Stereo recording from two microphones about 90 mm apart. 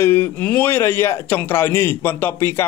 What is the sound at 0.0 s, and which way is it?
A man's voice, 25° left (ahead or behind).